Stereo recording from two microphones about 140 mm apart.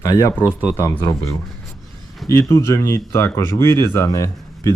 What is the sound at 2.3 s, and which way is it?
Speech, 20° left (ahead or behind).